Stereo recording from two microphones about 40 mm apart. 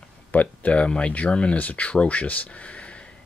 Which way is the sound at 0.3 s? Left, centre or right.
Left.